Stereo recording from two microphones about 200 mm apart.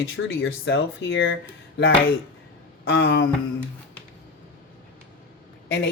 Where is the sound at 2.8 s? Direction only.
70° left (ahead or behind).